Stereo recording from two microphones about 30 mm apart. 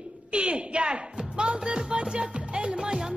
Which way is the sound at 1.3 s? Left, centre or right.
Right.